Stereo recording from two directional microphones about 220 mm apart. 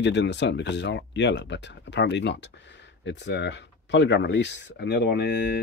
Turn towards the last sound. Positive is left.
turn(degrees=50)  # may be behind; listen again after turning